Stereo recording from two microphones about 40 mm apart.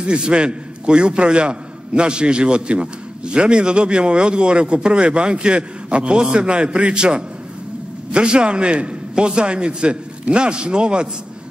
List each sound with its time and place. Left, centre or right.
0.0 s a man's voice: right